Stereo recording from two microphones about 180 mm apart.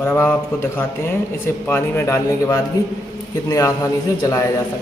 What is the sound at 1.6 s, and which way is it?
A man's voice, 10° left (ahead or behind).